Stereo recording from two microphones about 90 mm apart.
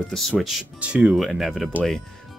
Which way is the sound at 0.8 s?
15° right (ahead or behind).